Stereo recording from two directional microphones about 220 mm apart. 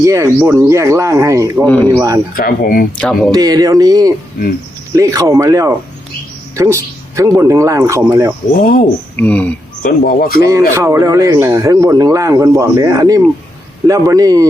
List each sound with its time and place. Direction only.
0.0 s speech: 15° right (ahead or behind)
1.6 s speech: 5° left (ahead or behind)
1.9 s speech: 15° right (ahead or behind)
2.3 s speech: 40° left (ahead or behind)
3.0 s speech: 5° left (ahead or behind)
3.3 s speech: 15° right (ahead or behind)
7.2 s speech: 15° right (ahead or behind)
8.5 s speech: 40° left (ahead or behind)
9.1 s speech: 5° left (ahead or behind)
9.8 s speech: 40° left (ahead or behind)
10.8 s speech: 15° right (ahead or behind)